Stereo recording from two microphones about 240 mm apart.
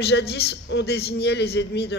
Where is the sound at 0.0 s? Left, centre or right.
Left.